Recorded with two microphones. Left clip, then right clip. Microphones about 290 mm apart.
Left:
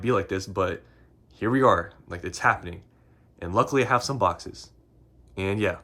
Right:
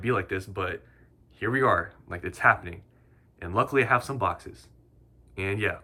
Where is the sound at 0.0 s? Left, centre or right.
Centre.